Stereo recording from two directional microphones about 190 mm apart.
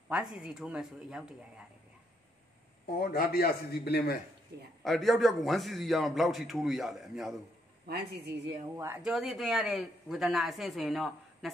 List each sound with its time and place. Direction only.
0.1 s a man's voice: centre (ahead or behind)
2.9 s a man's voice: 55° left (ahead or behind)
4.8 s a man's voice: centre (ahead or behind)
7.9 s a woman's voice: 60° right (ahead or behind)
8.7 s speech: 10° right (ahead or behind)
9.1 s a man's voice: centre (ahead or behind)